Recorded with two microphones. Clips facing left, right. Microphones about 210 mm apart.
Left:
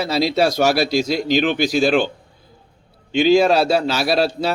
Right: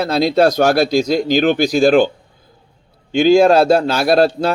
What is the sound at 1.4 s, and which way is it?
Speech, 45° right (ahead or behind).